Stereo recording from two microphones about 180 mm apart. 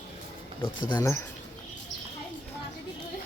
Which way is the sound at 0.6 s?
25° left (ahead or behind).